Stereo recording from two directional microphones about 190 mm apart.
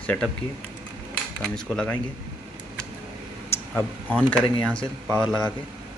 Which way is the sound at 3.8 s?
5° left (ahead or behind).